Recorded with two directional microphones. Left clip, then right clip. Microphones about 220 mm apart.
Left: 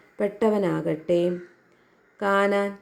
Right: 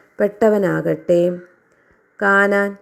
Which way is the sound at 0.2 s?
20° right (ahead or behind).